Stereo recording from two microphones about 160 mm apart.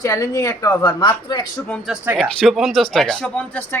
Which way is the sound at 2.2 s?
Centre (ahead or behind).